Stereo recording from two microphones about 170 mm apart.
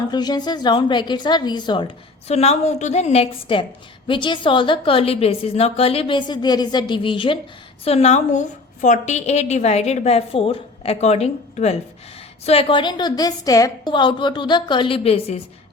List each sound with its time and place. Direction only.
0.1 s a woman's voice: 25° left (ahead or behind)